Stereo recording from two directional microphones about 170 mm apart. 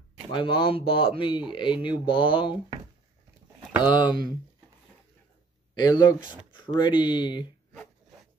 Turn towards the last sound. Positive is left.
turn(degrees=25)  # may be behind; listen again after turning